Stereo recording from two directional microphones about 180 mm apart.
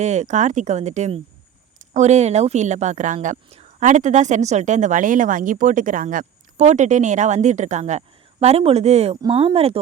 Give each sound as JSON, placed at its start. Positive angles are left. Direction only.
{"t": 0.0, "sound": "speech", "side_deg": -40}